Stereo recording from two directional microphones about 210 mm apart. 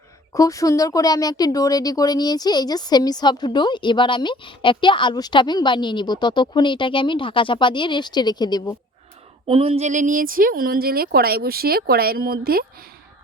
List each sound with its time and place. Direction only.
0.3 s speech: 15° left (ahead or behind)
9.5 s a woman's voice: 25° right (ahead or behind); by 12.6 s 45° right (ahead or behind)